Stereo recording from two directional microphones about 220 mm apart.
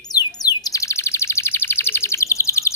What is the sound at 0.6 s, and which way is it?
Chirp, 15° left (ahead or behind).